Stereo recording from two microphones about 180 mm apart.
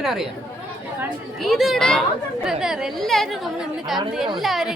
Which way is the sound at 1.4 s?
Centre (ahead or behind).